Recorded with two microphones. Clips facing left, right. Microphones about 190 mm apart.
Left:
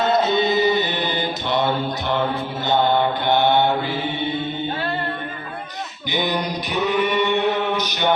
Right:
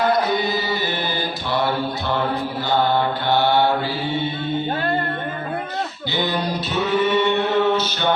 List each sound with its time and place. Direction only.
0.0 s mantra: 25° left (ahead or behind)
2.6 s mantra: 20° left (ahead or behind)
6.1 s a sound: 15° left (ahead or behind)